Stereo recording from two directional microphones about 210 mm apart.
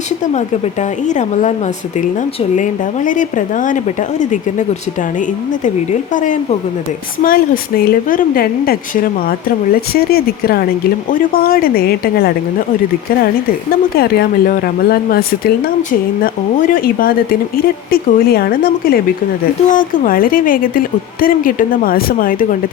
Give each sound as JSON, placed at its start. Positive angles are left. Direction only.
{"t": 0.3, "sound": "speech", "side_deg": 35}
{"t": 2.6, "sound": "speech", "side_deg": 35}
{"t": 5.6, "sound": "speech", "side_deg": 35}
{"t": 14.0, "sound": "speech", "side_deg": 45}